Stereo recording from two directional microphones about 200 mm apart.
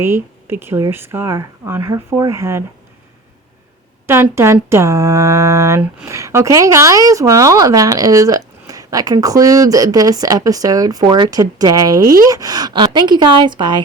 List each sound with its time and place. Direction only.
0.0 s speech: 10° right (ahead or behind)
4.0 s speech: 15° right (ahead or behind)